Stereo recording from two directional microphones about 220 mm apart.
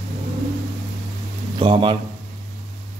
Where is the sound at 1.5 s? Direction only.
20° right (ahead or behind).